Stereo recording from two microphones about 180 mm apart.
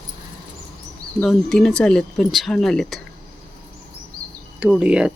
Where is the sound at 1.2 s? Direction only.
5° left (ahead or behind).